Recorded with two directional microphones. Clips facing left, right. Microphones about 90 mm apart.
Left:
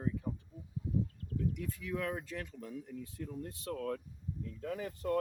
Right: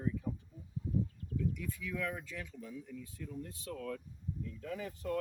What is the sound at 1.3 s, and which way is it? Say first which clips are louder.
Speech: left 1 dB; 50° left (ahead or behind).